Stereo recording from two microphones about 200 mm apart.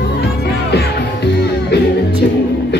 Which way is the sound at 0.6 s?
55° left (ahead or behind).